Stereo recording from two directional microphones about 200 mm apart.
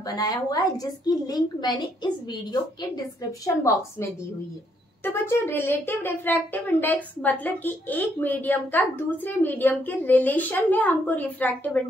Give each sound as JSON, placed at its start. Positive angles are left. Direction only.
{"t": 0.0, "sound": "a woman's voice", "side_deg": 20}
{"t": 5.0, "sound": "a child's voice", "side_deg": 10}